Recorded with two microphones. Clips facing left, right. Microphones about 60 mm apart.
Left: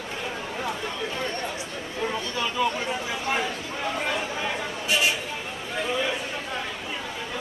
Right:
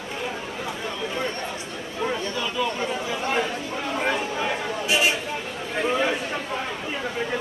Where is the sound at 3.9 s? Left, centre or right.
Centre.